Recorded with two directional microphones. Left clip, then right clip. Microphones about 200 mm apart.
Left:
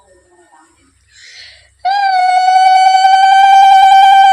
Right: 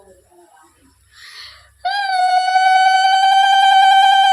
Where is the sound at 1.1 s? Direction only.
5° right (ahead or behind).